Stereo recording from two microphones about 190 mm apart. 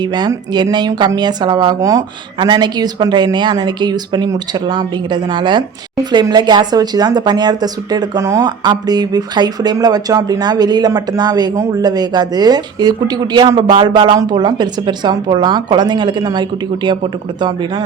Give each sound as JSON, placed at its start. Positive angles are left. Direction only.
{"t": 0.0, "sound": "speech", "side_deg": -25}